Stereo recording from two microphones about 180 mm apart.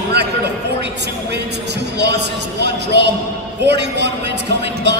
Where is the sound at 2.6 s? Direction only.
70° right (ahead or behind).